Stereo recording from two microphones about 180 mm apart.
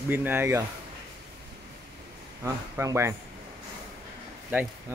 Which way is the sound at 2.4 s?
15° right (ahead or behind).